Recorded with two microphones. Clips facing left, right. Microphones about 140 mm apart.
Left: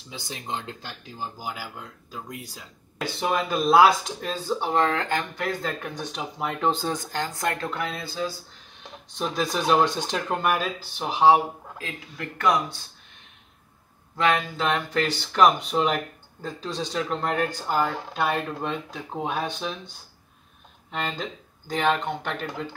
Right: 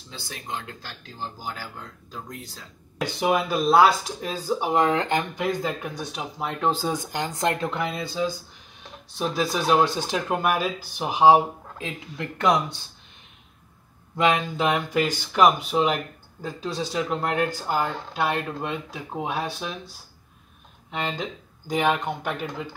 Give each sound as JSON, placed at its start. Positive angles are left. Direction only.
{"t": 0.1, "sound": "speech", "side_deg": 20}
{"t": 3.2, "sound": "speech", "side_deg": -10}
{"t": 9.1, "sound": "speech", "side_deg": -5}
{"t": 11.8, "sound": "speech", "side_deg": -25}
{"t": 14.1, "sound": "speech", "side_deg": -15}